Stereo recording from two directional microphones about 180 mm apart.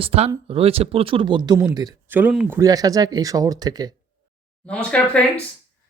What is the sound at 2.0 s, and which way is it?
Speech, 10° right (ahead or behind).